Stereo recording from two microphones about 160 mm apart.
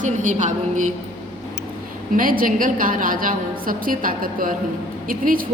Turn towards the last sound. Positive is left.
turn(degrees=-60)  # may be behind; listen again after turning